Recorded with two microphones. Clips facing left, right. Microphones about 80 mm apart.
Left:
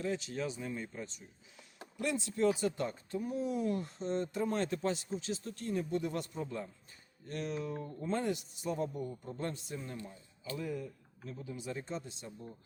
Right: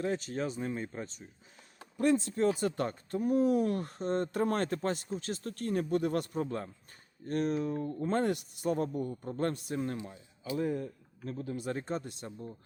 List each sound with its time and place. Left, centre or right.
0.0 s speech: right
10.6 s speech: right